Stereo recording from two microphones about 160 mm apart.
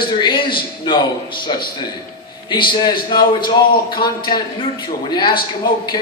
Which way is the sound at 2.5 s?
30° left (ahead or behind).